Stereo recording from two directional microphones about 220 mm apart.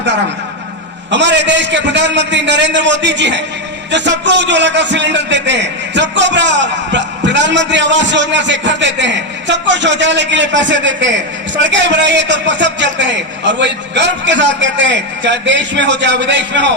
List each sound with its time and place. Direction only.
1.1 s a man's voice: 55° right (ahead or behind)